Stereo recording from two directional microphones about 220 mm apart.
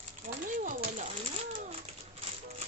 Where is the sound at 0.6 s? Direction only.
35° right (ahead or behind).